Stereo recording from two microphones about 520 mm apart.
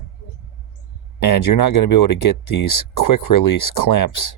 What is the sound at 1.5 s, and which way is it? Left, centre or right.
Speech, left.